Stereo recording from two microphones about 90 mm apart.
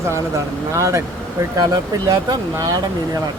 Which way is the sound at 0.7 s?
35° right (ahead or behind).